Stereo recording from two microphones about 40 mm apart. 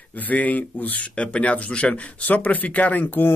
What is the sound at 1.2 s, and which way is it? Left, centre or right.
Speech, left.